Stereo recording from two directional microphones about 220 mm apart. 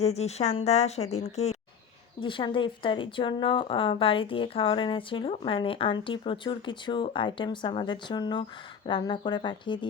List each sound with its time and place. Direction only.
0.0 s a woman's voice: 30° left (ahead or behind)